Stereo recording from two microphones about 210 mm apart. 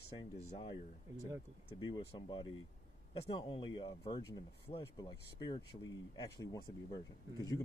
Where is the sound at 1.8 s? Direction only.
20° left (ahead or behind).